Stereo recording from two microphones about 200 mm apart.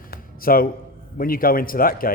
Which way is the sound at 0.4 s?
45° left (ahead or behind).